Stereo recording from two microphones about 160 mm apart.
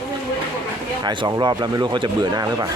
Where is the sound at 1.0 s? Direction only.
25° right (ahead or behind).